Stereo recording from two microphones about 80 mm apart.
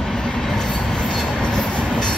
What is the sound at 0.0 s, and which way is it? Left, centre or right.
Train, centre.